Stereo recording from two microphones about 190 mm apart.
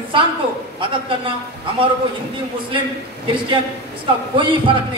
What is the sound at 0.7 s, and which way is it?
Speech, 25° right (ahead or behind).